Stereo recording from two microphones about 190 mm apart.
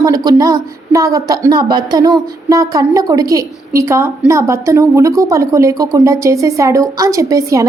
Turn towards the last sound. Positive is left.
turn(degrees=-15)  # may be behind; listen again after turning